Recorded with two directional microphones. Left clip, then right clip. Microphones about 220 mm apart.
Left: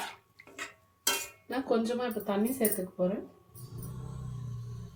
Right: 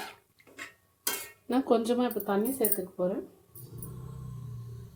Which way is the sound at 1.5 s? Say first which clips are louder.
Right 4 dB; 35° right (ahead or behind).